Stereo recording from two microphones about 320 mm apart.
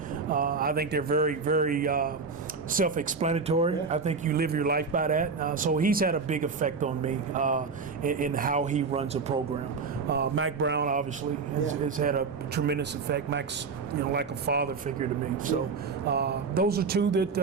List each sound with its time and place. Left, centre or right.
0.3 s speech: right
10.1 s speech: right
16.0 s speech: right